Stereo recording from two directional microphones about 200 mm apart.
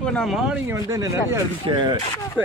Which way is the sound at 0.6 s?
15° right (ahead or behind).